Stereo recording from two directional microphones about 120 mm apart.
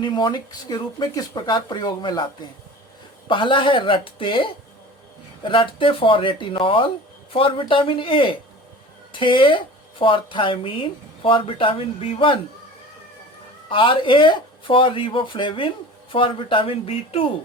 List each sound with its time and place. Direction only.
0.0 s speech: 40° left (ahead or behind)
13.7 s speech: 45° left (ahead or behind)